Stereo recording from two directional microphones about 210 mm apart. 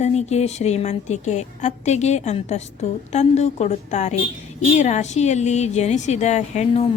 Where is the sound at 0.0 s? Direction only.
30° left (ahead or behind).